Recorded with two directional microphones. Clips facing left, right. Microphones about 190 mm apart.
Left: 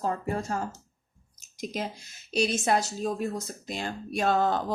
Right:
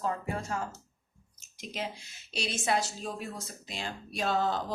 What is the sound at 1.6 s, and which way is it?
A woman's voice, 40° left (ahead or behind).